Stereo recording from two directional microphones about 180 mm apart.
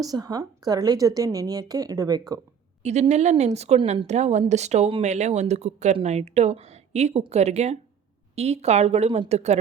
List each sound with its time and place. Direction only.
0.0 s a woman's voice: 20° right (ahead or behind)
2.8 s a woman's voice: 40° right (ahead or behind)